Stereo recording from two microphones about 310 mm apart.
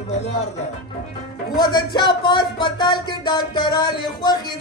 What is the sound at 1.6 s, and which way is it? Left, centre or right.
A man's voice, centre.